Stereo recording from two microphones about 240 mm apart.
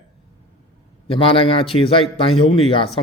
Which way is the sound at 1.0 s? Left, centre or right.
Left.